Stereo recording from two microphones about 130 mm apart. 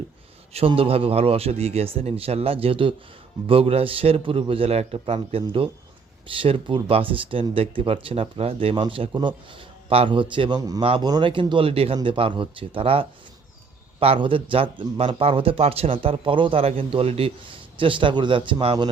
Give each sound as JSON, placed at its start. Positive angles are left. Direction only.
{"t": 0.5, "sound": "speech", "side_deg": -45}